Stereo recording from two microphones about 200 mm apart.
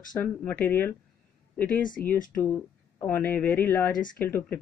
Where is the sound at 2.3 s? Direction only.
10° left (ahead or behind).